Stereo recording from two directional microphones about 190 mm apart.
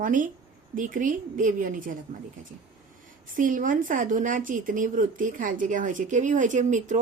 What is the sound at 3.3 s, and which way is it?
Speech, 45° right (ahead or behind).